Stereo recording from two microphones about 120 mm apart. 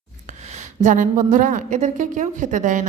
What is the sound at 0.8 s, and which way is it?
A woman's voice, 90° right.